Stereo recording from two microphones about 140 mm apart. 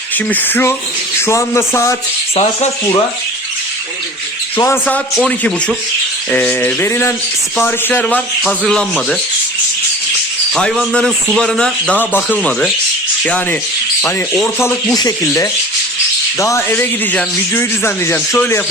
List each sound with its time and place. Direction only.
0.3 s speech: 15° left (ahead or behind)
2.3 s speech: 50° left (ahead or behind)
4.6 s speech: 15° left (ahead or behind)
5.1 s speech: 5° left (ahead or behind)
10.5 s speech: 5° left (ahead or behind)
14.9 s speech: 25° left (ahead or behind)